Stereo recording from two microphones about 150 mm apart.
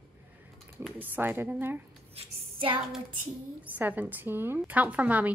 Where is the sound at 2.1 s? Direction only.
35° right (ahead or behind).